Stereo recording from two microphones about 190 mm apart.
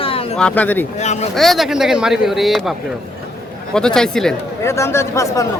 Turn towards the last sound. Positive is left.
turn(degrees=15)  # may be behind; listen again after turning